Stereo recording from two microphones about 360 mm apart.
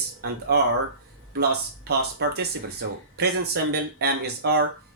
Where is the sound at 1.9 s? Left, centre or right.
Right.